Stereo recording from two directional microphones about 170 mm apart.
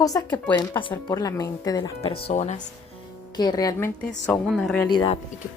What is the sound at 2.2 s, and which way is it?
Speech, 45° left (ahead or behind).